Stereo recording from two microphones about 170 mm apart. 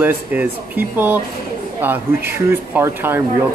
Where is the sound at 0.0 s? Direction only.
10° right (ahead or behind).